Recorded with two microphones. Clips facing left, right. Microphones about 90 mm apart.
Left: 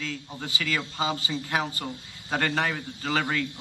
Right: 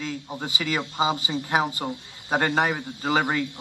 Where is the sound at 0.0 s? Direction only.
20° right (ahead or behind).